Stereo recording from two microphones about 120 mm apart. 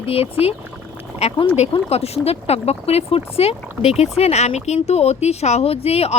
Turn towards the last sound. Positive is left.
turn(degrees=55)  # may be behind; listen again after turning